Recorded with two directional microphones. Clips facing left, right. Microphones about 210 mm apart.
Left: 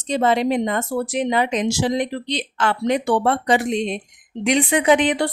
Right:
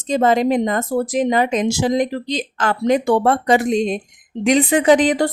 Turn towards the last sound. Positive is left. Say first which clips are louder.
# right 3 dB
turn(degrees=-40)  # may be behind; listen again after turning